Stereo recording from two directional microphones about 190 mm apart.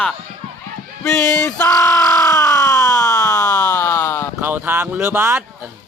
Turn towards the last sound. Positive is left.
turn(degrees=-10)  # may be behind; listen again after turning